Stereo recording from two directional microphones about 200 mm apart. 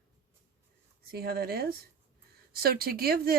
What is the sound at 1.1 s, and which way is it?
Speech, 50° right (ahead or behind).